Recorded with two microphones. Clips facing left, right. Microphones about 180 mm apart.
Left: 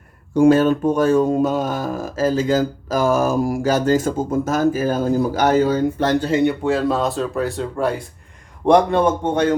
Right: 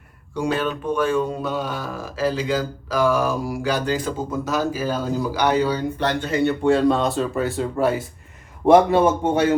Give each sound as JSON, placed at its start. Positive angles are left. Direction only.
{"t": 0.3, "sound": "speech", "side_deg": 45}
{"t": 6.7, "sound": "a man's voice", "side_deg": 0}